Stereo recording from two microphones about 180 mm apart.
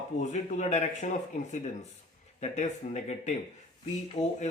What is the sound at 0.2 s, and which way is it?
Speech, 40° left (ahead or behind).